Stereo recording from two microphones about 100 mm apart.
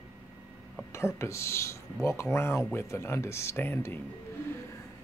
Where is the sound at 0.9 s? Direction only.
25° left (ahead or behind).